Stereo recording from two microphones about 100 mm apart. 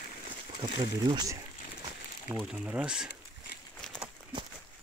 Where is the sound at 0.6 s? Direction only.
50° right (ahead or behind).